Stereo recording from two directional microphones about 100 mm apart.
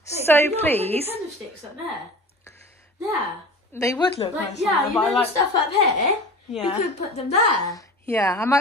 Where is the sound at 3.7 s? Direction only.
25° left (ahead or behind).